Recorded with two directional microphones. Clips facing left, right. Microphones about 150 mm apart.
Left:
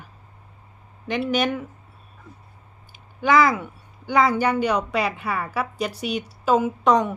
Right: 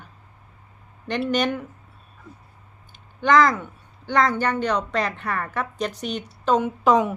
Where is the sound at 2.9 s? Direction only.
5° left (ahead or behind).